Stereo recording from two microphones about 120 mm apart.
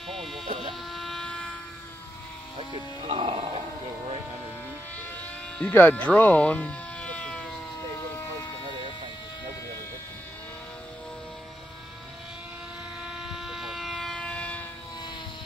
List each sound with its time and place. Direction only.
0.1 s vehicle: centre (ahead or behind)
0.4 s a sound: 50° right (ahead or behind)
0.7 s train: centre (ahead or behind)
3.1 s music: 55° right (ahead or behind)
5.5 s speech: 10° left (ahead or behind)
13.1 s vehicle: 5° right (ahead or behind)